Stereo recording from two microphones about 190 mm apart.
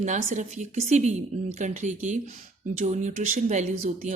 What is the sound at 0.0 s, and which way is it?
Speech, 40° right (ahead or behind).